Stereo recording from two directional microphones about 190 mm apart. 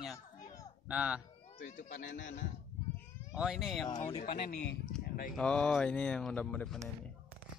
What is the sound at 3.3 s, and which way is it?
Speech, 5° right (ahead or behind).